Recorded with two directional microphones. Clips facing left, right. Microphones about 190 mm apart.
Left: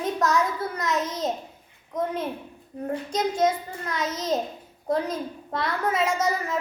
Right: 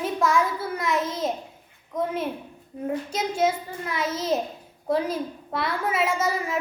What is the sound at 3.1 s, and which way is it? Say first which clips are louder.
A child's voice: left 2 dB; 5° right (ahead or behind).